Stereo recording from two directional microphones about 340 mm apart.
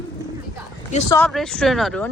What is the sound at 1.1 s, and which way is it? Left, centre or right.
Speech, centre.